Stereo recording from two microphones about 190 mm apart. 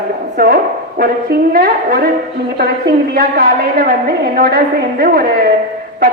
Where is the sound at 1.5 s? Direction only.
55° right (ahead or behind).